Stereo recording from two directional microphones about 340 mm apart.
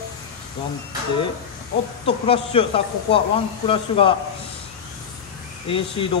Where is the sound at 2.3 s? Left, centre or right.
Centre.